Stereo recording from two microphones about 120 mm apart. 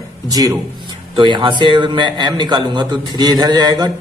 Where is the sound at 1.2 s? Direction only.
40° right (ahead or behind).